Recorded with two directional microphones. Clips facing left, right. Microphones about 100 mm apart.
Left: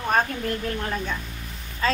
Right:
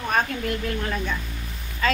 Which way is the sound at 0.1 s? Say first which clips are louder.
Left 1 dB; 35° left (ahead or behind).